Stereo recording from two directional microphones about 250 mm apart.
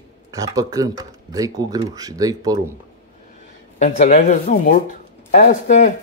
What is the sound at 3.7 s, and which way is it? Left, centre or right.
Speech, left.